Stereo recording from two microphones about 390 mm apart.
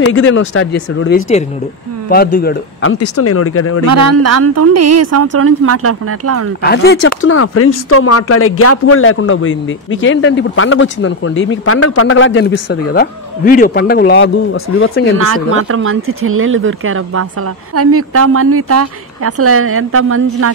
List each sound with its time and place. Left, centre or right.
0.1 s speech: left
3.8 s a woman's voice: right
6.6 s speech: left
15.1 s a woman's voice: right